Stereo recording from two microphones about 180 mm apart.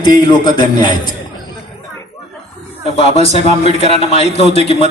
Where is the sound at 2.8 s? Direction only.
35° left (ahead or behind).